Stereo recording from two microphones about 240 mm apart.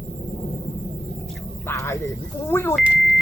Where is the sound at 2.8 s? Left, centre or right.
Centre.